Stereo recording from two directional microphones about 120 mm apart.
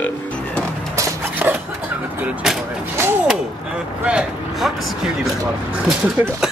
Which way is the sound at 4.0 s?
10° right (ahead or behind).